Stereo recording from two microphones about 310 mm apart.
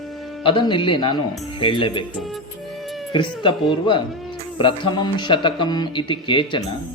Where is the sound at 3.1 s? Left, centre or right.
Centre.